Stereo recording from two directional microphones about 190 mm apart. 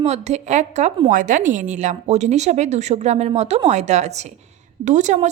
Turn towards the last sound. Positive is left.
turn(degrees=-40)  # may be behind; listen again after turning